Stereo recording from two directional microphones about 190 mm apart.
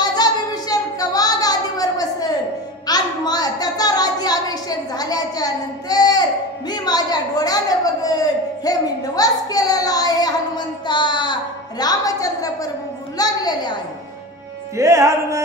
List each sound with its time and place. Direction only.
0.0 s a sound: 20° left (ahead or behind)
2.9 s a woman's voice: 20° left (ahead or behind)
14.8 s music: 15° right (ahead or behind)